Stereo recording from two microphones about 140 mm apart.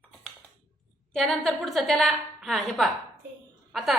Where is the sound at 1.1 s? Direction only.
5° left (ahead or behind).